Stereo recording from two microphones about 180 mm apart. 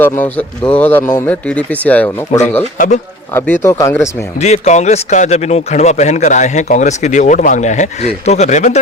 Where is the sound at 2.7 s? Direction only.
45° left (ahead or behind).